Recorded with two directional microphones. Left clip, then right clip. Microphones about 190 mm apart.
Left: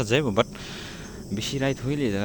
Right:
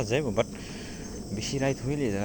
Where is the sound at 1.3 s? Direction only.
30° left (ahead or behind).